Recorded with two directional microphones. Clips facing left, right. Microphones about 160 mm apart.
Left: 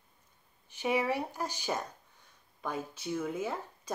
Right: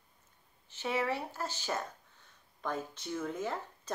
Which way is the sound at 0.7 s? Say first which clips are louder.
Left 3 dB; 15° left (ahead or behind).